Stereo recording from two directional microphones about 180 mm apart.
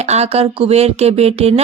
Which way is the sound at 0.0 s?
35° right (ahead or behind).